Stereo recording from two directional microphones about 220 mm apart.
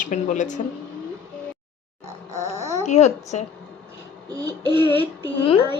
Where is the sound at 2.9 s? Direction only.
30° left (ahead or behind).